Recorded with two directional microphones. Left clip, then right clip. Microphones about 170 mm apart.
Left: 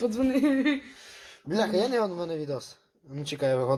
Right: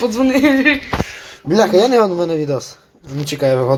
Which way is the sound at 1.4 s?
10° right (ahead or behind).